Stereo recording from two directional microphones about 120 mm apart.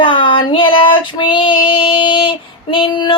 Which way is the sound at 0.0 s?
45° left (ahead or behind).